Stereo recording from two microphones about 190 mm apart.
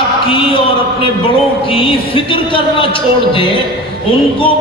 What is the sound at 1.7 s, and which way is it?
A man's voice, 30° left (ahead or behind).